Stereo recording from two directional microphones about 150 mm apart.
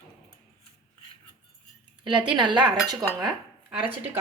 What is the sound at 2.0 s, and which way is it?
Speech, 30° right (ahead or behind).